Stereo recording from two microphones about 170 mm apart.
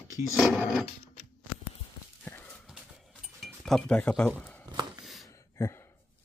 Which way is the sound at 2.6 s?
5° right (ahead or behind).